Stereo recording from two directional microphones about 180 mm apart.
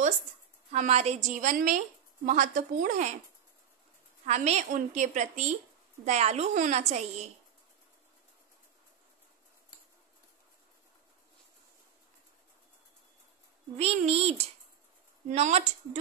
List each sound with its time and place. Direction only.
0.7 s a woman's voice: 40° right (ahead or behind)
4.3 s a woman's voice: 40° right (ahead or behind)
13.7 s a woman's voice: 35° right (ahead or behind)